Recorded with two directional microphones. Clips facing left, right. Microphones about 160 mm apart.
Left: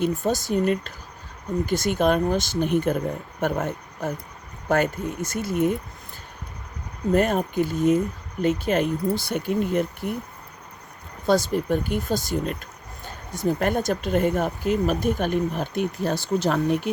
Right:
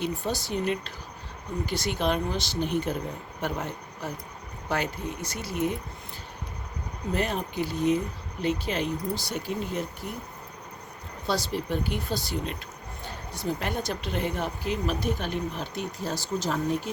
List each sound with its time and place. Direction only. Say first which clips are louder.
0.0 s speech: left 7 dB; 45° left (ahead or behind)
7.1 s speech: left 8 dB; 50° left (ahead or behind)
11.3 s speech: left 8 dB; 50° left (ahead or behind); by 16.9 s 70° left (ahead or behind)